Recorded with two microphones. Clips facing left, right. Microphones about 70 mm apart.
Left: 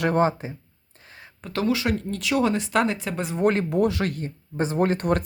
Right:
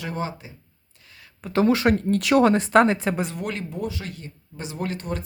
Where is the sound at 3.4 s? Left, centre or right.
Left.